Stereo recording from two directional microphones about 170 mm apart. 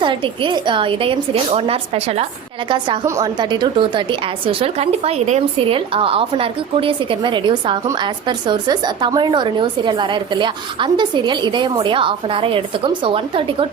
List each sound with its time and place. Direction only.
0.0 s a woman's voice: 30° right (ahead or behind)